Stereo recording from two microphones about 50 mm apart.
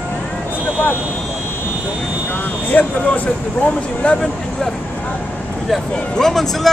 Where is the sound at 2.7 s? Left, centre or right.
Left.